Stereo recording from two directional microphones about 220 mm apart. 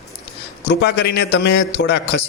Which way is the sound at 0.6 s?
50° left (ahead or behind).